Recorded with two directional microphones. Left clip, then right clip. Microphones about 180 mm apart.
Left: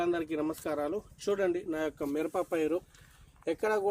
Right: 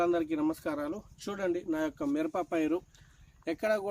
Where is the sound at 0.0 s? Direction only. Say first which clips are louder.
Right 2 dB; 20° right (ahead or behind).